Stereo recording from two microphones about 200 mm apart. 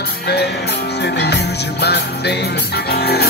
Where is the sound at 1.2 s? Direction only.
55° left (ahead or behind).